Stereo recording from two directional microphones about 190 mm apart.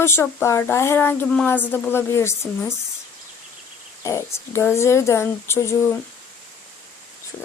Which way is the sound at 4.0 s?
15° left (ahead or behind).